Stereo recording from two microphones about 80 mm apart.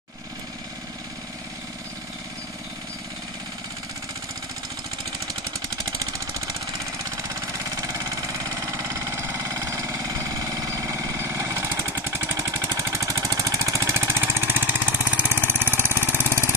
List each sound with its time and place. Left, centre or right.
5.9 s vehicle: right
7.1 s engine: right